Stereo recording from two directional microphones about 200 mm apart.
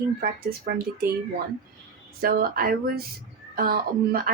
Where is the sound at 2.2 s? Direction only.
45° right (ahead or behind).